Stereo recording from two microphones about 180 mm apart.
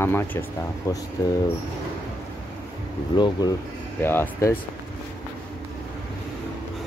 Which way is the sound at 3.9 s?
10° left (ahead or behind).